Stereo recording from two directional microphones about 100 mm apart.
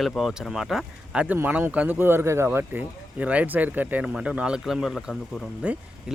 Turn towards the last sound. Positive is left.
turn(degrees=-15)  # may be behind; listen again after turning